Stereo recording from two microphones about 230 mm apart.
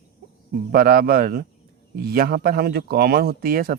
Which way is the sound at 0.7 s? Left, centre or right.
Right.